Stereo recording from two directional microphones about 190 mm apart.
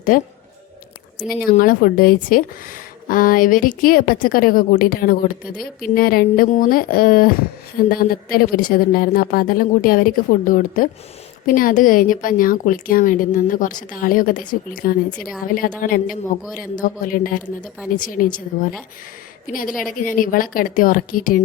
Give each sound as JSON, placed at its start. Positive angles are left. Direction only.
{"t": 0.1, "sound": "speech", "side_deg": 45}
{"t": 1.2, "sound": "speech", "side_deg": 0}
{"t": 1.5, "sound": "speech", "side_deg": 50}
{"t": 19.5, "sound": "speech", "side_deg": 45}